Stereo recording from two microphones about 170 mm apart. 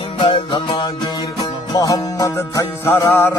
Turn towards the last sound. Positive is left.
turn(degrees=15)  # may be behind; listen again after turning